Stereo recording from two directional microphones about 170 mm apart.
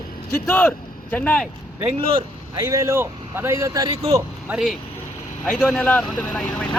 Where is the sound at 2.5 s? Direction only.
20° right (ahead or behind).